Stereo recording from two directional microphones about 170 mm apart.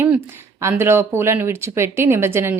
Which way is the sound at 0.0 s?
15° right (ahead or behind).